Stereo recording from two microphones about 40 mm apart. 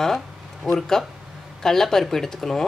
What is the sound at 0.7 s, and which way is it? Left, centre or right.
Speech, centre.